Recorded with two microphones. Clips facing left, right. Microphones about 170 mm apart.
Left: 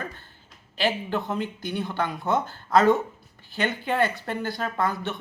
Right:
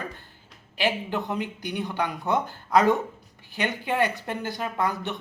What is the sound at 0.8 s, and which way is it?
Speech, 15° right (ahead or behind).